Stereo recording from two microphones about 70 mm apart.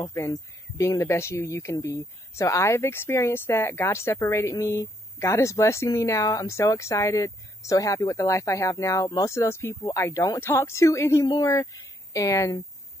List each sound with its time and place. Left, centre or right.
0.0 s speech: left
9.3 s speech: left
9.8 s speech: left